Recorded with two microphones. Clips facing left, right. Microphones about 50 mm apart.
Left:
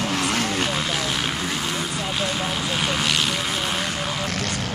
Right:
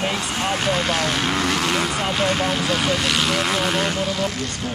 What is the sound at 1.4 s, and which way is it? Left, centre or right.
Vehicle, right.